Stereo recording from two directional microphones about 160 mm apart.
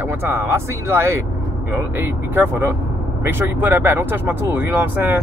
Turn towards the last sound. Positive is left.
turn(degrees=-10)  # may be behind; listen again after turning